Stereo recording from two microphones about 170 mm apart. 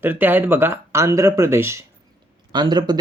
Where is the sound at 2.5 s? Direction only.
25° right (ahead or behind).